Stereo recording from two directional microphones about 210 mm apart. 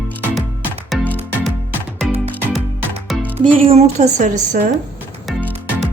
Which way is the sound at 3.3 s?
25° right (ahead or behind).